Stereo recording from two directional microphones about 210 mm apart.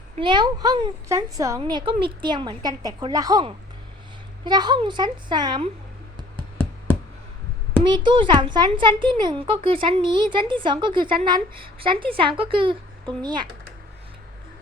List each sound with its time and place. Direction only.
0.2 s speech: 20° right (ahead or behind)
7.9 s speech: 20° right (ahead or behind)